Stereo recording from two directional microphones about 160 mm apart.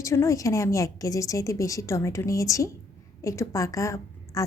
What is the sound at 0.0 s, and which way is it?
A woman's voice, 20° left (ahead or behind).